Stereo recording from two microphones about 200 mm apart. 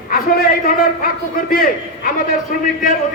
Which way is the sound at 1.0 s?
45° left (ahead or behind).